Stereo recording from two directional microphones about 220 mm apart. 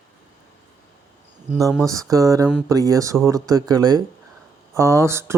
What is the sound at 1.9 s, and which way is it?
Speech, 15° right (ahead or behind).